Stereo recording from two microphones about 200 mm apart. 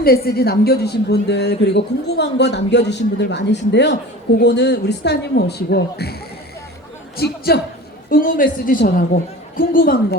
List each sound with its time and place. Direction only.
0.3 s speech: 50° left (ahead or behind)
7.2 s a woman's voice: 55° left (ahead or behind)